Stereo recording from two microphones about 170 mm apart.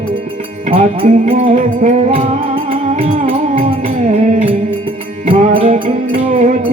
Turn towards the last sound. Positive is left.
turn(degrees=-45)  # may be behind; listen again after turning